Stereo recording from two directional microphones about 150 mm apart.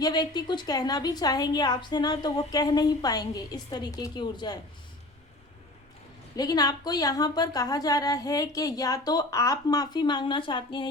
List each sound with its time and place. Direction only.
0.0 s a woman's voice: 25° left (ahead or behind)
6.3 s a woman's voice: 25° left (ahead or behind)